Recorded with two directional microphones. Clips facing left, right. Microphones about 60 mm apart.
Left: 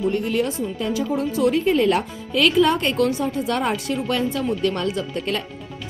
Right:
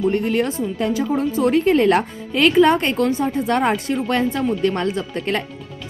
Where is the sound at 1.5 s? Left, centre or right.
Right.